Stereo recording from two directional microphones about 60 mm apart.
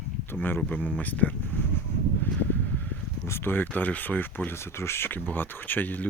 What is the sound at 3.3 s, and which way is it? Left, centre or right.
Speech, left.